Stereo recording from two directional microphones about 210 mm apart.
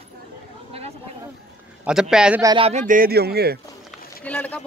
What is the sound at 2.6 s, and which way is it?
Speech, 35° right (ahead or behind).